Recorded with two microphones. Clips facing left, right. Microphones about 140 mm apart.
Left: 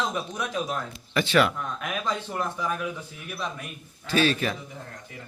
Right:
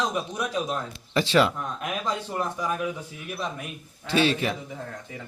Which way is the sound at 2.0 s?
10° right (ahead or behind).